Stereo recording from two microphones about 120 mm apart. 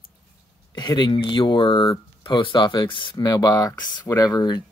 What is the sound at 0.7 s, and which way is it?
Speech, 35° left (ahead or behind).